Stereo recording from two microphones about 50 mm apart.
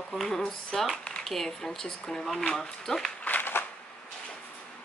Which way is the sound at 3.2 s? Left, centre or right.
Left.